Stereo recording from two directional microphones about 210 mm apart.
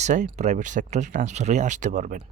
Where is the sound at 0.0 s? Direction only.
35° right (ahead or behind).